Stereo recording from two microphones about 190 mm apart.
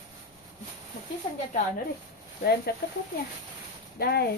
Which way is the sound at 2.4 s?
55° left (ahead or behind).